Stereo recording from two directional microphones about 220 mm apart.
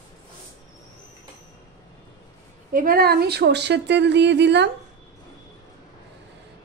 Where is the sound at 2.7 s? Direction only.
40° right (ahead or behind).